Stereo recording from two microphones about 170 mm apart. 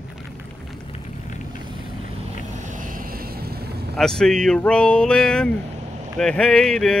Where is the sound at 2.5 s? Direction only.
50° right (ahead or behind); by 3.9 s 70° right (ahead or behind).